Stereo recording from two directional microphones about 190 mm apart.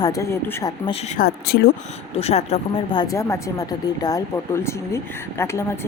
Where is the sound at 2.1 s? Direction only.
35° left (ahead or behind).